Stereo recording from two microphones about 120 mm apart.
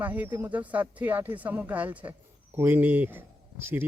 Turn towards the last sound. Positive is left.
turn(degrees=-20)  # may be behind; listen again after turning